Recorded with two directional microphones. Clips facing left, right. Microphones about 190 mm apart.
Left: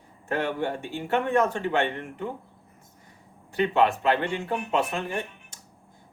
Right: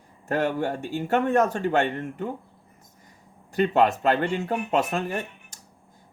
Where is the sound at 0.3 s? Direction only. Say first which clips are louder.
Right 3 dB; 45° right (ahead or behind).